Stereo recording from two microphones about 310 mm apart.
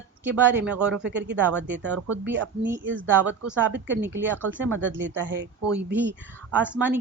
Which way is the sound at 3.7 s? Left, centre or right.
Right.